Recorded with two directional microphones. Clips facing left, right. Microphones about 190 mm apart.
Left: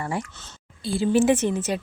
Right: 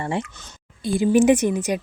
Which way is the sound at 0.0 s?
25° right (ahead or behind).